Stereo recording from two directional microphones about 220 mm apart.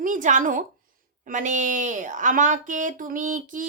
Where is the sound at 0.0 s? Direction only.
35° right (ahead or behind).